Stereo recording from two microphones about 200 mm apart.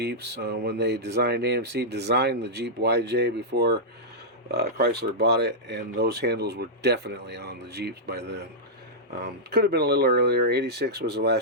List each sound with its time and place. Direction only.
0.0 s speech: 55° right (ahead or behind)